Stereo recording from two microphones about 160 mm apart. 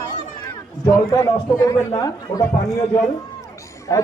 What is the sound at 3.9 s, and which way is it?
Speech, 20° left (ahead or behind).